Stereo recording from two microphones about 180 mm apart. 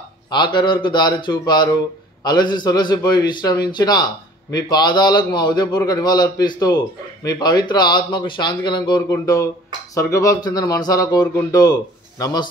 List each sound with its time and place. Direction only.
0.3 s a man's voice: 25° left (ahead or behind)